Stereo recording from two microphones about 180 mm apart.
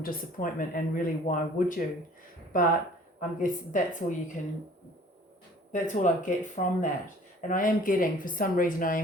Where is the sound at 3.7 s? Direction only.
45° left (ahead or behind).